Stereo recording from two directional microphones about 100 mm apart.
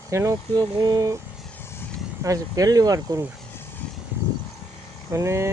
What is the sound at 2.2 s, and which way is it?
Speech, 35° right (ahead or behind).